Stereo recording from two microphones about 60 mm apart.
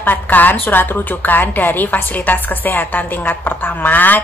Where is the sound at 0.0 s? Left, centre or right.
Left.